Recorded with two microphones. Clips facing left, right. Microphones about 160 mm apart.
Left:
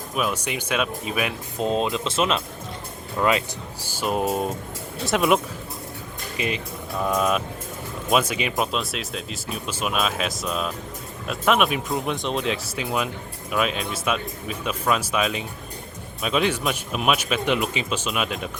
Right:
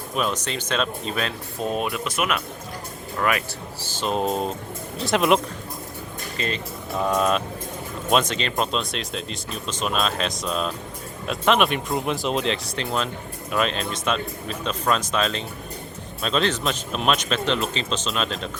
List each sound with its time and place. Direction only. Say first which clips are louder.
0.2 s speech: even; 10° left (ahead or behind)
6.3 s speech: left 1 dB; 15° left (ahead or behind)
7.0 s speech: right 1 dB; centre (ahead or behind)